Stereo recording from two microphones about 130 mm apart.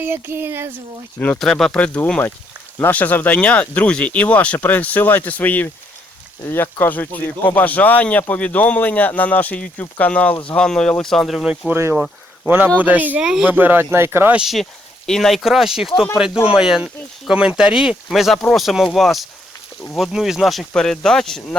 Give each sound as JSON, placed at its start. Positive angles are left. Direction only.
{"t": 0.0, "sound": "speech", "side_deg": -15}
{"t": 1.4, "sound": "speech", "side_deg": 0}
{"t": 11.7, "sound": "speech", "side_deg": -20}
{"t": 14.4, "sound": "speech", "side_deg": 0}